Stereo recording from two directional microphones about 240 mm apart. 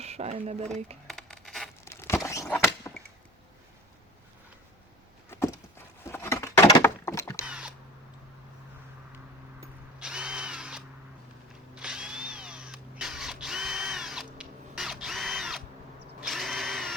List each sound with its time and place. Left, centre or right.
0.0 s speech: right
1.0 s a sound: centre
5.3 s a sound: centre
6.1 s keys jangling: centre
7.4 s camera: centre
10.0 s drill: centre